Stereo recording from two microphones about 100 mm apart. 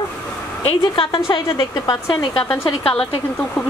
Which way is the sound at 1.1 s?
55° left (ahead or behind).